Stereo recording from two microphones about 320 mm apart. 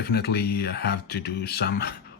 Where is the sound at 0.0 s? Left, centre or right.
Left.